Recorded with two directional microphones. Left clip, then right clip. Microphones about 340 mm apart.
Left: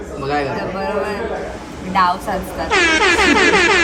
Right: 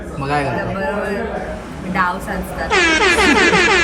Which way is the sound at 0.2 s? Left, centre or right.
Centre.